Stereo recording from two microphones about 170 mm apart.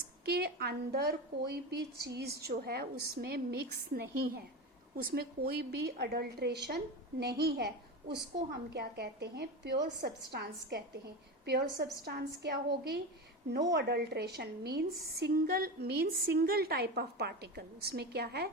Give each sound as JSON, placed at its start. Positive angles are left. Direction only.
{"t": 0.3, "sound": "a woman's voice", "side_deg": -65}
{"t": 8.7, "sound": "a woman's voice", "side_deg": -75}
{"t": 10.3, "sound": "a woman's voice", "side_deg": -70}